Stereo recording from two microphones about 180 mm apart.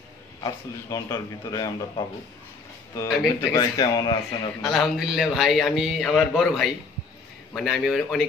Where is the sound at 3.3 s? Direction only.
20° left (ahead or behind).